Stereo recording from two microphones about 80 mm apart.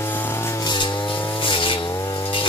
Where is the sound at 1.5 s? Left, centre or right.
Left.